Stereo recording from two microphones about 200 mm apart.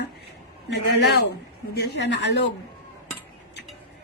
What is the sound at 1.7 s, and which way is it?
Speech, 60° left (ahead or behind).